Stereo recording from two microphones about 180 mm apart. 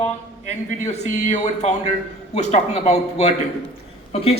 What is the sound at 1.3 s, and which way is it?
Speech, 35° left (ahead or behind).